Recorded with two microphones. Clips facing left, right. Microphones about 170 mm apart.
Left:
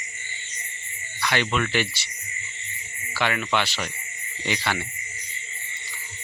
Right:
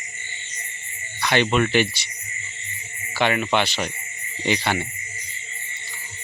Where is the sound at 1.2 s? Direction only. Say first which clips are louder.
Right 5 dB; 25° right (ahead or behind).